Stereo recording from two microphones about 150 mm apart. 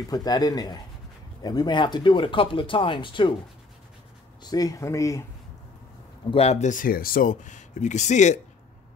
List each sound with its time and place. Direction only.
0.1 s speech: 25° left (ahead or behind)
4.4 s speech: 25° left (ahead or behind)
6.3 s speech: 45° left (ahead or behind)